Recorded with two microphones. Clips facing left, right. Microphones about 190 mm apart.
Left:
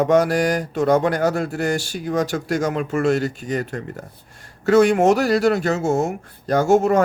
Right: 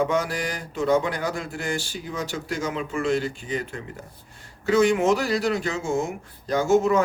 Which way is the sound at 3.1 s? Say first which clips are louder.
Left 3 dB; 70° left (ahead or behind).